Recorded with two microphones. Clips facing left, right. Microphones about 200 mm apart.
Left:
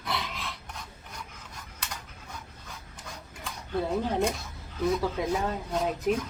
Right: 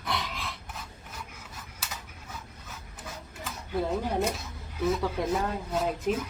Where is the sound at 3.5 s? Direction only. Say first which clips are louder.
Even; 10° right (ahead or behind).